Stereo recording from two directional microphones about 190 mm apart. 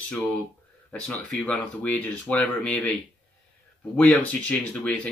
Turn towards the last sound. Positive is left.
turn(degrees=10)  # may be behind; listen again after turning